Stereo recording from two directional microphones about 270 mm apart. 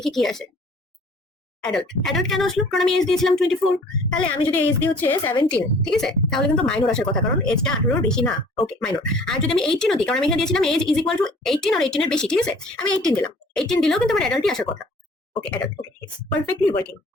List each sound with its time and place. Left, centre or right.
0.0 s a woman's voice: centre
1.6 s a woman's voice: centre